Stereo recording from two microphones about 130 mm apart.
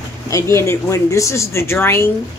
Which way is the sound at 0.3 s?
20° left (ahead or behind).